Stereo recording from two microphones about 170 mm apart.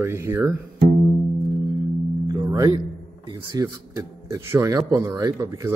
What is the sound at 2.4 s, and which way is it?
A man's voice, 20° right (ahead or behind).